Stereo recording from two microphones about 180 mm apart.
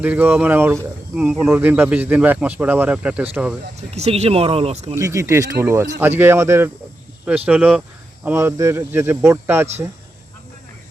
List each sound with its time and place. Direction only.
0.0 s speech: 10° right (ahead or behind)
3.8 s speech: 35° right (ahead or behind)
4.9 s speech: 15° right (ahead or behind)